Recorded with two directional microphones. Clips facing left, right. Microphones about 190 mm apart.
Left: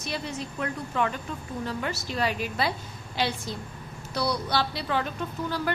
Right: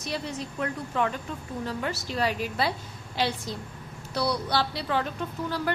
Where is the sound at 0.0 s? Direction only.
35° right (ahead or behind).